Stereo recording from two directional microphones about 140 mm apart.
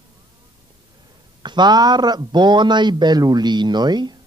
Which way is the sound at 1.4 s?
30° right (ahead or behind).